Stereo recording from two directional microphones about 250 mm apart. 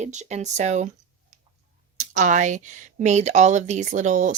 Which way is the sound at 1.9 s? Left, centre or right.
Right.